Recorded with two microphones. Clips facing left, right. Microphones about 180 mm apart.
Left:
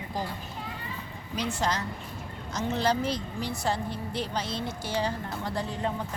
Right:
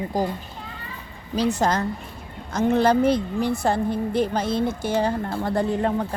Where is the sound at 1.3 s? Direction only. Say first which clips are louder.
Right 8 dB; 40° right (ahead or behind).